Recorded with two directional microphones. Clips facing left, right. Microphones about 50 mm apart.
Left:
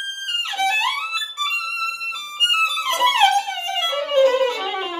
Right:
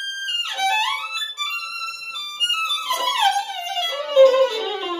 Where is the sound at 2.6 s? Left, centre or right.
Left.